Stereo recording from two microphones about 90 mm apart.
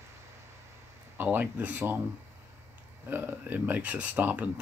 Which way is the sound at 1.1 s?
20° right (ahead or behind).